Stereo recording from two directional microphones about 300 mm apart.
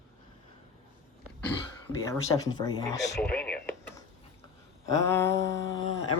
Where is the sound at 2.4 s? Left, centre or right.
Centre.